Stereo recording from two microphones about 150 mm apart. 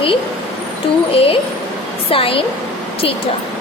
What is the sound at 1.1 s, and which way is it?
A woman's voice, 40° left (ahead or behind).